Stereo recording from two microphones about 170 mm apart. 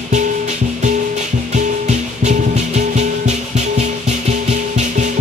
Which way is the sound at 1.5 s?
45° right (ahead or behind).